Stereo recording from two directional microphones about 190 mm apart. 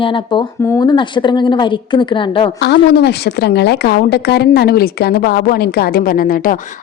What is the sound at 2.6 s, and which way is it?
A woman's voice, 60° left (ahead or behind).